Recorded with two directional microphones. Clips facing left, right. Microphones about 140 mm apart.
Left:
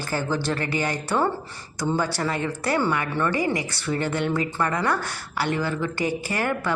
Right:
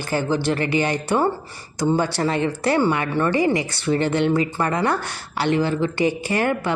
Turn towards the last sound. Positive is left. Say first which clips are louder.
# right 4 dB
turn(degrees=-20)  # may be behind; listen again after turning